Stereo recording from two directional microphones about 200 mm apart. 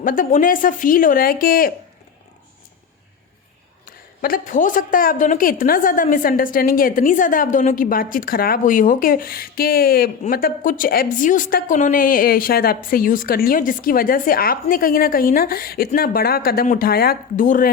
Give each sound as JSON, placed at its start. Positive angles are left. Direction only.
{"t": 0.0, "sound": "a woman's voice", "side_deg": 45}
{"t": 3.8, "sound": "a woman's voice", "side_deg": 45}